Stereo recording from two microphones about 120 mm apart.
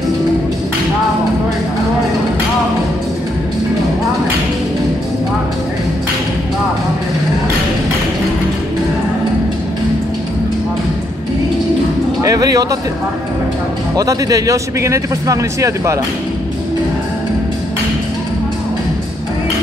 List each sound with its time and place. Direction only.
12.2 s music: 30° right (ahead or behind)
13.9 s a man's voice: 30° right (ahead or behind)